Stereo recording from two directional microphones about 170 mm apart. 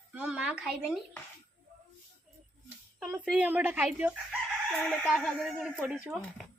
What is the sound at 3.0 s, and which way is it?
A woman's voice, 5° right (ahead or behind).